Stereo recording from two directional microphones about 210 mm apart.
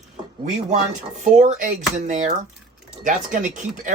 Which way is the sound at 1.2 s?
35° right (ahead or behind).